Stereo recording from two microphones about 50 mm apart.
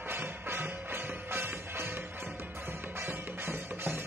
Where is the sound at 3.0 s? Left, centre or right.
Right.